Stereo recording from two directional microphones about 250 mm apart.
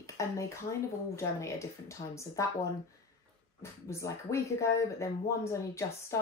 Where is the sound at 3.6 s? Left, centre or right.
Centre.